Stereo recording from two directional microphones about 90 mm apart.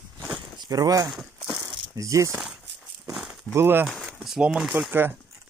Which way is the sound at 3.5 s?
25° right (ahead or behind).